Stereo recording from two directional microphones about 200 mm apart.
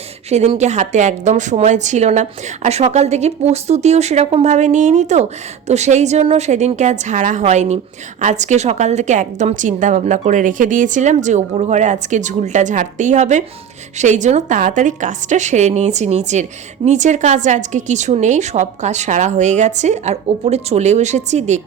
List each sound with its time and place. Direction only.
0.3 s a woman's voice: 35° right (ahead or behind)